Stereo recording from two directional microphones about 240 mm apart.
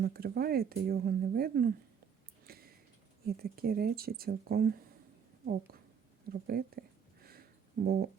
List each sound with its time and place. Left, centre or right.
0.0 s speech: right
2.5 s a sound: right
3.2 s speech: right
7.9 s speech: right